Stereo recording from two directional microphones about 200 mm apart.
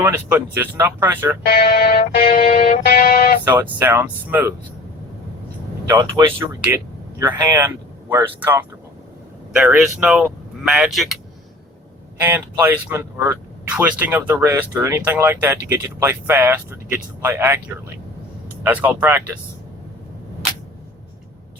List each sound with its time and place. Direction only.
0.0 s speech: 10° right (ahead or behind)
1.5 s music: 45° left (ahead or behind)
3.4 s speech: 10° right (ahead or behind)
5.9 s speech: 20° right (ahead or behind); by 11.2 s centre (ahead or behind)
12.2 s speech: 10° right (ahead or behind)
18.6 s speech: 10° right (ahead or behind)